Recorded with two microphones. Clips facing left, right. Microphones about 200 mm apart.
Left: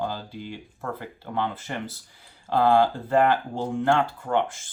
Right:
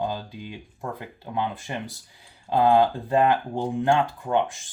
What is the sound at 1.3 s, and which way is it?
Speech, 15° right (ahead or behind).